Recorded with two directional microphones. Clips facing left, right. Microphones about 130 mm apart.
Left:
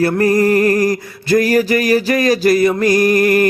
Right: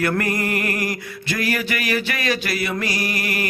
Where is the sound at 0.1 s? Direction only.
35° left (ahead or behind).